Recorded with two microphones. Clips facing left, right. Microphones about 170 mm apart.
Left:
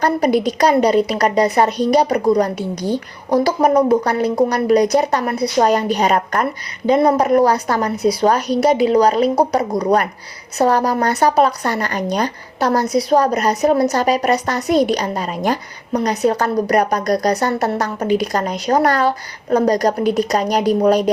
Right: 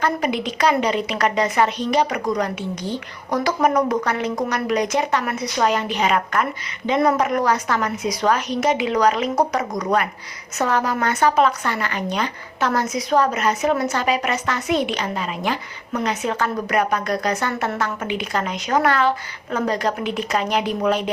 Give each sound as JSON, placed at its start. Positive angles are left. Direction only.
{"t": 0.0, "sound": "speech", "side_deg": 40}